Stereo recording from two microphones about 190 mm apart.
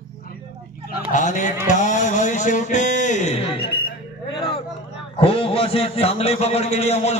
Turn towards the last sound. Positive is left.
turn(degrees=35)  # may be behind; listen again after turning